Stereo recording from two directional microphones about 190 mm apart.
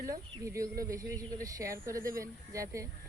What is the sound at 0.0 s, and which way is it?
A woman's voice, 15° right (ahead or behind).